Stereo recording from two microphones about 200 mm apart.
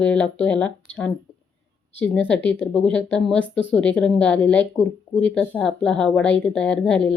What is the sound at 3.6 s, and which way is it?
Speech, 65° left (ahead or behind).